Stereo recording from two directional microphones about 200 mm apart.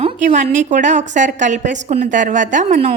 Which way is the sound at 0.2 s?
40° right (ahead or behind).